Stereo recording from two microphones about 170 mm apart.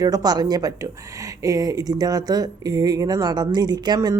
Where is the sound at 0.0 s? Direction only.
20° right (ahead or behind).